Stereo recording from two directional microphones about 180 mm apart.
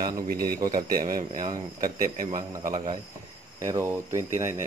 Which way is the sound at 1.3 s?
25° right (ahead or behind).